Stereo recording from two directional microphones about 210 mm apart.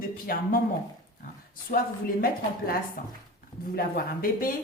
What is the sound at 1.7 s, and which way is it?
A woman's voice, 45° left (ahead or behind).